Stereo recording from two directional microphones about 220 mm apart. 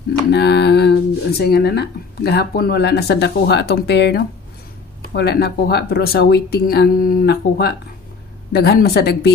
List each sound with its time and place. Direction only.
0.3 s speech: 50° left (ahead or behind)